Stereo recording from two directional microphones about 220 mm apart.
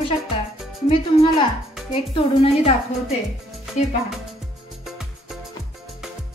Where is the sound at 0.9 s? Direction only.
25° left (ahead or behind).